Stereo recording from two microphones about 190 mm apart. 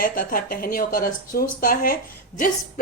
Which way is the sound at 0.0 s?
45° left (ahead or behind).